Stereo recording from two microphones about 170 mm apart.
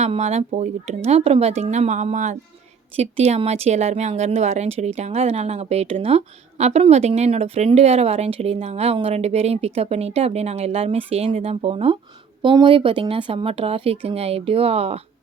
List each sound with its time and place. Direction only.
0.0 s a woman's voice: 40° right (ahead or behind)